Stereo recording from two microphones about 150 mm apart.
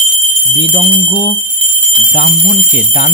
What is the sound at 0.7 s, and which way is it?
Speech, 45° left (ahead or behind).